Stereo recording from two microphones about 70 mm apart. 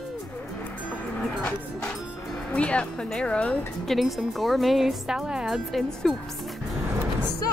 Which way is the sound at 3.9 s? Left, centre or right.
Centre.